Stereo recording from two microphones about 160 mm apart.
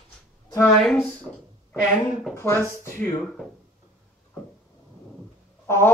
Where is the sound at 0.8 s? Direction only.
5° left (ahead or behind).